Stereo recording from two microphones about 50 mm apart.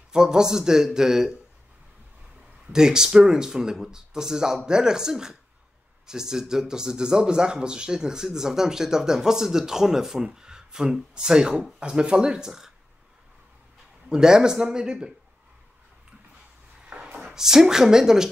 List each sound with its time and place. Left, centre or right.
0.1 s speech: centre
2.7 s speech: centre
14.0 s speech: centre
16.9 s a sound: right
17.2 s speech: centre